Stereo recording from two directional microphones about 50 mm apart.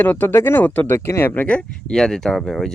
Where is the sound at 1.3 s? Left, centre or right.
Left.